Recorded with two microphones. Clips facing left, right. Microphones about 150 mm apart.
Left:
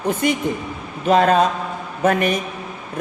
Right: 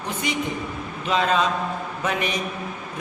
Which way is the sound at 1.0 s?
50° left (ahead or behind).